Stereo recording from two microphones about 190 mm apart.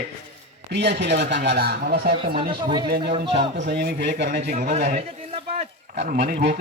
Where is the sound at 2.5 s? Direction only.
25° right (ahead or behind).